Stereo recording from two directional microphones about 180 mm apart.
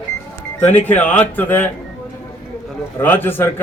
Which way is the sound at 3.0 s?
10° left (ahead or behind).